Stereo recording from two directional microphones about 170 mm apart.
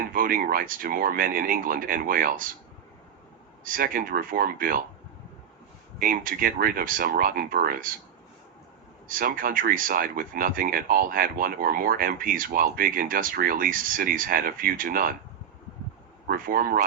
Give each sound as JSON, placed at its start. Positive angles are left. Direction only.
{"t": 0.0, "sound": "speech", "side_deg": -55}
{"t": 3.6, "sound": "speech", "side_deg": -55}
{"t": 6.0, "sound": "speech", "side_deg": -55}
{"t": 9.0, "sound": "speech", "side_deg": -55}
{"t": 16.2, "sound": "speech", "side_deg": -60}